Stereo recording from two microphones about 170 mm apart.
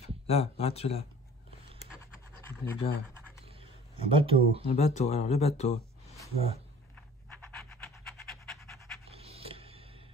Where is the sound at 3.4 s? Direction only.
35° right (ahead or behind).